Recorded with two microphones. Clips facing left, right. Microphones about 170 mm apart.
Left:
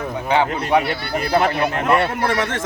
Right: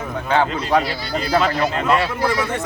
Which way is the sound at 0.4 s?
60° left (ahead or behind).